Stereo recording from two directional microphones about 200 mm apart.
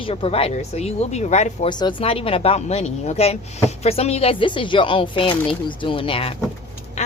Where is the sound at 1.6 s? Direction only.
20° left (ahead or behind).